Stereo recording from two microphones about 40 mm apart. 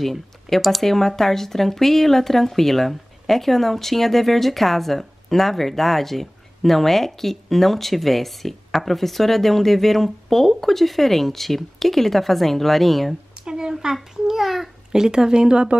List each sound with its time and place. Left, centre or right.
0.0 s speech: centre
13.4 s a sound: centre
14.1 s a child's voice: centre
14.9 s speech: centre